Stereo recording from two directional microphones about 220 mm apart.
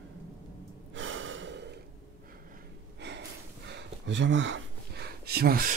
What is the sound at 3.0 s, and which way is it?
Gasp, 50° right (ahead or behind).